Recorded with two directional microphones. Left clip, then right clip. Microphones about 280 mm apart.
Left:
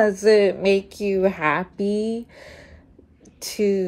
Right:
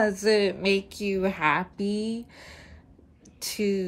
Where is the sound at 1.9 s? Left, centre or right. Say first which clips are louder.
Left 7 dB; centre.